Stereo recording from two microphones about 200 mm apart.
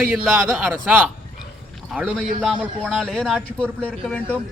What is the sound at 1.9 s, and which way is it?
Speech, 10° right (ahead or behind).